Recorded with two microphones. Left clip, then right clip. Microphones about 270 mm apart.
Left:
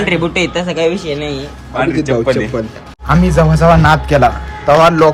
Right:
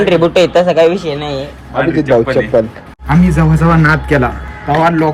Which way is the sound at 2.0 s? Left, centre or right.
Centre.